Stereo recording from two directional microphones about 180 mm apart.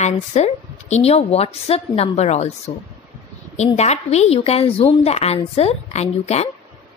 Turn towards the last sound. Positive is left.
turn(degrees=35)  # may be behind; listen again after turning